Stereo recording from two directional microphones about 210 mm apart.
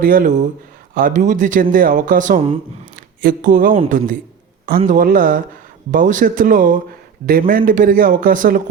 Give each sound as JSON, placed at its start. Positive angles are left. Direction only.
{"t": 0.0, "sound": "a man's voice", "side_deg": -40}